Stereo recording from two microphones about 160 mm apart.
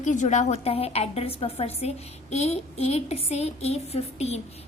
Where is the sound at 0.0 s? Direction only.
50° left (ahead or behind).